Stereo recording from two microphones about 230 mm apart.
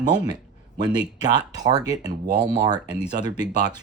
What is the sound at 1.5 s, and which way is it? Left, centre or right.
Speech, centre.